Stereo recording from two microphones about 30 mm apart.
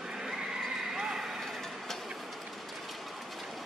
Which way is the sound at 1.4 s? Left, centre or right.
Centre.